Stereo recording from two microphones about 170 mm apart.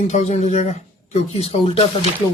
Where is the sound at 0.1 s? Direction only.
40° left (ahead or behind).